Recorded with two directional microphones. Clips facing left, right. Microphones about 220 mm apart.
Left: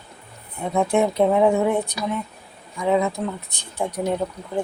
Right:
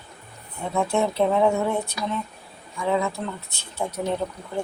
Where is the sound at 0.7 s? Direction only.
15° left (ahead or behind).